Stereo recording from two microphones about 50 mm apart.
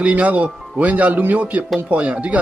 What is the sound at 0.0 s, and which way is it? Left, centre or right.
Speech, right.